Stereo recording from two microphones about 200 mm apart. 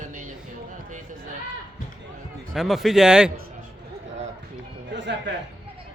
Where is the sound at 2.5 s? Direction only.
Centre (ahead or behind).